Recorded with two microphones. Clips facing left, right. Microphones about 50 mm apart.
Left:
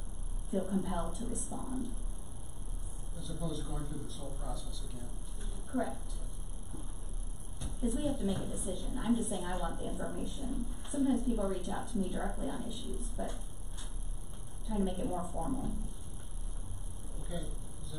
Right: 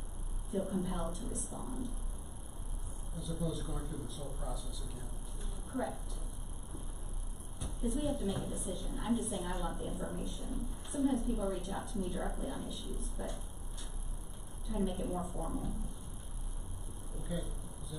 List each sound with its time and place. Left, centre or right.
0.5 s a woman's voice: centre
3.2 s a woman's voice: centre
7.6 s a woman's voice: centre
14.7 s a woman's voice: centre
17.2 s a sound: centre